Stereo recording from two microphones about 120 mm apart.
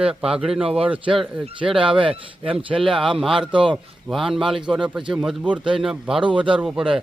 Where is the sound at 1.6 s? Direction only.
45° right (ahead or behind).